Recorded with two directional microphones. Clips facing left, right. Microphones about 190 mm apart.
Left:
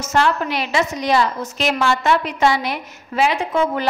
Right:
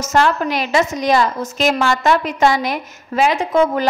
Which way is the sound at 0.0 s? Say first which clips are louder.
Right 2 dB; 45° right (ahead or behind).